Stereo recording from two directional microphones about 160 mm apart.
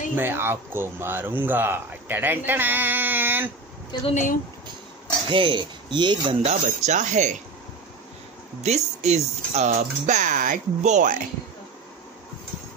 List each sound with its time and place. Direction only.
0.1 s speech: 15° right (ahead or behind)
4.0 s speech: 50° left (ahead or behind)
5.3 s speech: 30° right (ahead or behind)
6.4 s speech: 45° right (ahead or behind)
8.6 s speech: 45° right (ahead or behind)